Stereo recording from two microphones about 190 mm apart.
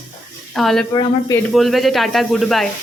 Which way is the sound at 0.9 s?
20° left (ahead or behind).